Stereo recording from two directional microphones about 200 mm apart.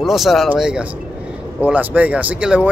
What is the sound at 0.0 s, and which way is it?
Speech, centre (ahead or behind).